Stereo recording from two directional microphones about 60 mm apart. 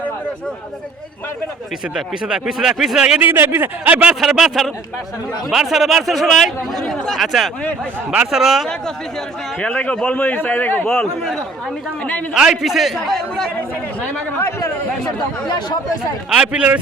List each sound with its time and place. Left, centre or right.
2.0 s speech: centre
3.2 s speech: right
3.8 s speech: right
4.1 s speech: centre
7.2 s speech: centre
9.6 s speech: centre
10.2 s a man's voice: left
12.3 s speech: centre
13.1 s speech: centre
16.3 s speech: centre